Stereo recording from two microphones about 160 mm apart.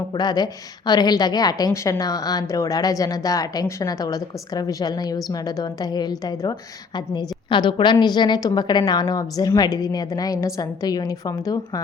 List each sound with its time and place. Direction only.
0.1 s a woman's voice: 25° left (ahead or behind)